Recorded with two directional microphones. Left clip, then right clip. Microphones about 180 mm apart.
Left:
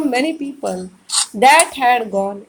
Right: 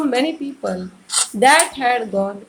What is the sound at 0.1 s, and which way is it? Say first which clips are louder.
A woman's voice: left 1 dB; 25° left (ahead or behind).